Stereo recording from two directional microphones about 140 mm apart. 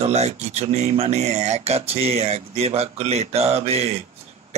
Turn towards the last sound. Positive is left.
turn(degrees=-50)  # may be behind; listen again after turning